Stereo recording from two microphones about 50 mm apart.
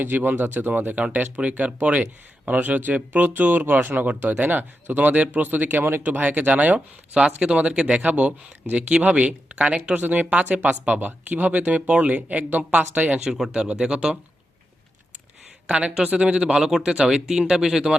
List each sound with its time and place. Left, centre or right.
0.0 s speech: right
6.1 s speech: right
13.3 s speech: centre
15.6 s speech: centre